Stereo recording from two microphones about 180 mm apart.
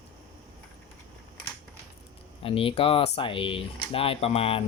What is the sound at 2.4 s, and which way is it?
Speech, 30° left (ahead or behind).